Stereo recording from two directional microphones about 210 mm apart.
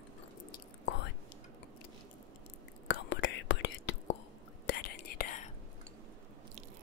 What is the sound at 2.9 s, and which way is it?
Whispering, 60° left (ahead or behind).